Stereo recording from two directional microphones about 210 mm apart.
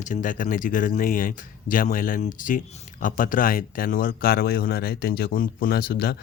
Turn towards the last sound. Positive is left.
turn(degrees=45)  # may be behind; listen again after turning